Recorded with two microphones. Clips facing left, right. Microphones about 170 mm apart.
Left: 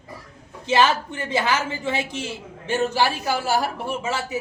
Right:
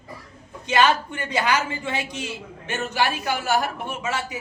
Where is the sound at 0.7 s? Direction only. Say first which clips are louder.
Left 1 dB; 30° left (ahead or behind).